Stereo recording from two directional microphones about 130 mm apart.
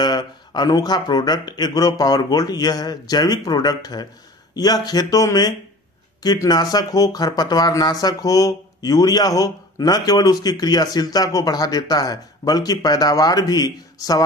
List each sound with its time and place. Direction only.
0.0 s speech: 35° left (ahead or behind)